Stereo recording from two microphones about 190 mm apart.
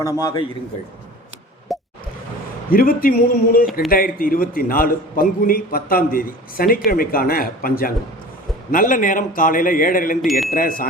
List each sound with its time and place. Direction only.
0.0 s a man's voice: 15° left (ahead or behind)
1.7 s plop: centre (ahead or behind)
2.7 s a man's voice: 50° left (ahead or behind)